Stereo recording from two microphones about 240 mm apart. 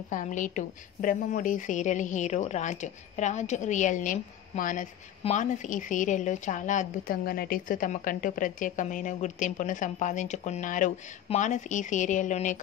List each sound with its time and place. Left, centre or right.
0.1 s a woman's voice: left